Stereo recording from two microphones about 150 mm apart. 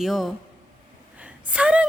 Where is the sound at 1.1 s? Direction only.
10° right (ahead or behind).